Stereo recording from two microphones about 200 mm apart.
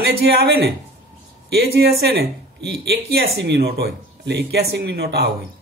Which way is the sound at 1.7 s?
55° right (ahead or behind).